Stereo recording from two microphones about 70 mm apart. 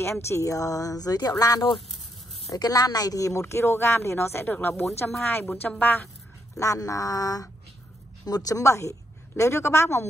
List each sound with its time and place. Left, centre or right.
0.0 s a woman's voice: left
6.6 s a woman's voice: left